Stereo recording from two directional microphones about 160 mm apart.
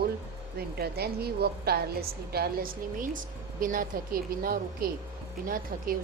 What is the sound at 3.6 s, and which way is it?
Speech, 55° right (ahead or behind).